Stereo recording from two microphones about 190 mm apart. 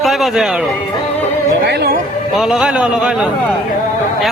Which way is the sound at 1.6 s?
60° right (ahead or behind).